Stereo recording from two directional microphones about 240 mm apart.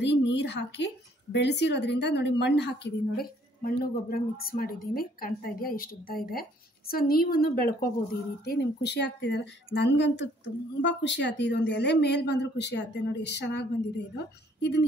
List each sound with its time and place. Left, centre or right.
0.0 s a woman's voice: left